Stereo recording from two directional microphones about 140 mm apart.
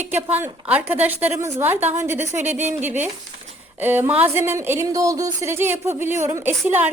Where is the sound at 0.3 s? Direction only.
15° right (ahead or behind).